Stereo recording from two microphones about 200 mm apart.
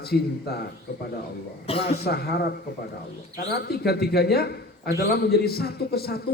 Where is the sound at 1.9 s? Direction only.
50° left (ahead or behind).